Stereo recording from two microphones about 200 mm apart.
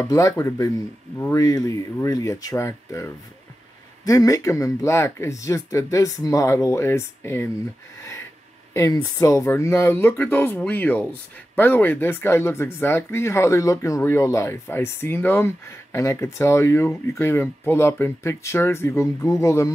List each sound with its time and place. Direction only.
0.0 s speech: 15° left (ahead or behind)
8.0 s a sound: 15° left (ahead or behind)
8.7 s speech: 15° left (ahead or behind)